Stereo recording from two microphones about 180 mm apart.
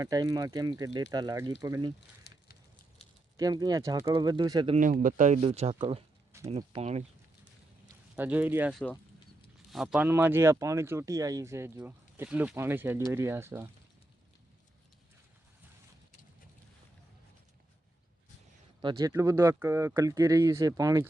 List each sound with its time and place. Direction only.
0.0 s speech: 20° right (ahead or behind)
2.0 s a sound: 65° left (ahead or behind)
3.3 s speech: 20° right (ahead or behind)
4.7 s speech: 45° right (ahead or behind)
8.1 s speech: 10° right (ahead or behind)
18.8 s speech: 25° right (ahead or behind)